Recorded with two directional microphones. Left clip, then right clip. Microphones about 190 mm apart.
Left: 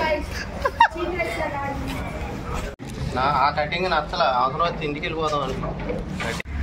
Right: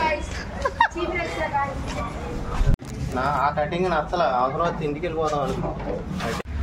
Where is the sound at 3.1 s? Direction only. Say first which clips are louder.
Left 2 dB; 45° right (ahead or behind).